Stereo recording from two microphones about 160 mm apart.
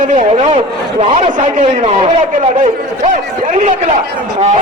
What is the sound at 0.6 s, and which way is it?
Speech, 30° right (ahead or behind).